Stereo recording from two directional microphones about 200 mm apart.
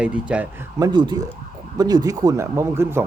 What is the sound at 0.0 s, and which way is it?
Speech, 5° right (ahead or behind).